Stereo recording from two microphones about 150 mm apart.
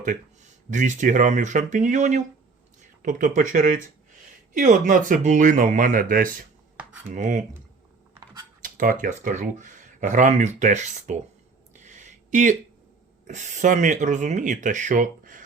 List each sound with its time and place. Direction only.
0.7 s speech: 55° right (ahead or behind)
8.6 s speech: 65° right (ahead or behind)
11.7 s a sound: 55° right (ahead or behind)
13.2 s speech: 55° right (ahead or behind)